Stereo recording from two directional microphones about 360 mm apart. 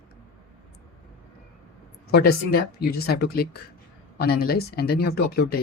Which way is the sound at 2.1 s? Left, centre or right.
Left.